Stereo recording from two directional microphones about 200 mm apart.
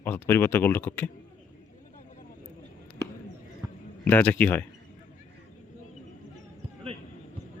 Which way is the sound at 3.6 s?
15° right (ahead or behind).